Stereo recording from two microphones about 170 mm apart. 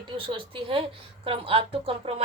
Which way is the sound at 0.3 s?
30° right (ahead or behind).